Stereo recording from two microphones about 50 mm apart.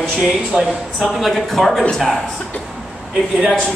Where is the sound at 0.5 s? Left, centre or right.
Centre.